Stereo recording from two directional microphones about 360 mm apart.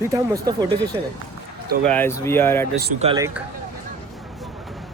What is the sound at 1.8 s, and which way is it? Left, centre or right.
Speech, centre.